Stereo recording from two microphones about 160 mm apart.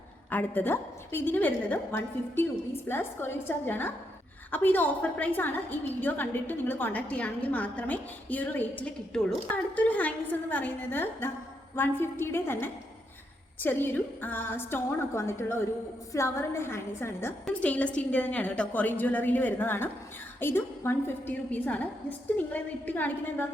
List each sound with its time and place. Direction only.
0.3 s a woman's voice: 10° left (ahead or behind)